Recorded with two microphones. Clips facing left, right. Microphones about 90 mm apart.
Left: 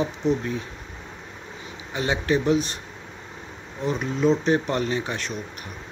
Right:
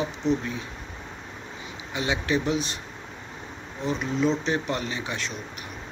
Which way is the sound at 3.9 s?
50° left (ahead or behind).